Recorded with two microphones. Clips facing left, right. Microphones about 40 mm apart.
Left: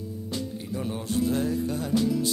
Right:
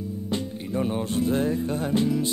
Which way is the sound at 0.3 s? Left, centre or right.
Right.